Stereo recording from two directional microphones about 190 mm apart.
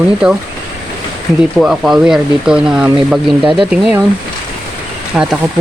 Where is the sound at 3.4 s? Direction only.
25° right (ahead or behind).